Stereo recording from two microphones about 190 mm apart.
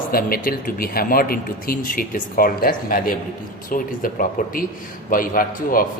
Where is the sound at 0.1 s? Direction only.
50° left (ahead or behind).